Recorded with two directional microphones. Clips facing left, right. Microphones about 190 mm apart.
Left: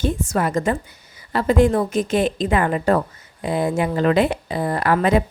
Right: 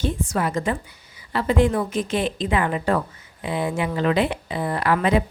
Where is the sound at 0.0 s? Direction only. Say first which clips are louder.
Left 3 dB; 45° left (ahead or behind).